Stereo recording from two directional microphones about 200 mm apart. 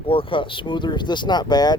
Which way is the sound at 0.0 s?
25° left (ahead or behind).